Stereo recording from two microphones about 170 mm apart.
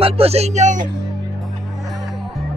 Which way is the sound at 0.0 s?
35° right (ahead or behind).